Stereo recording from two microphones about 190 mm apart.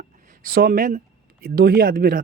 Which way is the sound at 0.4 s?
50° right (ahead or behind).